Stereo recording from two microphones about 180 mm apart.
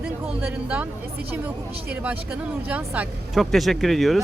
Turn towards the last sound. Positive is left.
turn(degrees=0)  # may be behind; listen again after turning